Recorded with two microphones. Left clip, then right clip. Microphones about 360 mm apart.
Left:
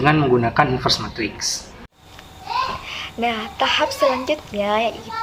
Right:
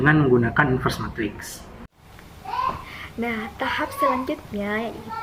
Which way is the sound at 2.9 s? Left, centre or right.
Centre.